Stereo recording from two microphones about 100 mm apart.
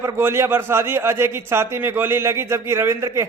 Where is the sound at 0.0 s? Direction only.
25° right (ahead or behind).